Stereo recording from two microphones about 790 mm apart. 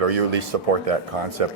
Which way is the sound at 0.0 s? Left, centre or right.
Right.